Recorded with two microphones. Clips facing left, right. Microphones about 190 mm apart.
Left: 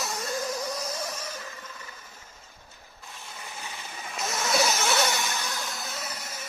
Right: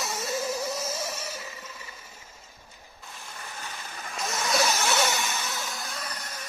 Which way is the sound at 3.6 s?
5° left (ahead or behind).